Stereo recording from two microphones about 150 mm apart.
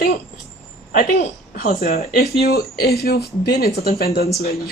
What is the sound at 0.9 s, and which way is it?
A woman's voice, 60° left (ahead or behind).